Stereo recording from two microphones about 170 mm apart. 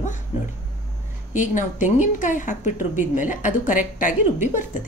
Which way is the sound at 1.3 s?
50° left (ahead or behind).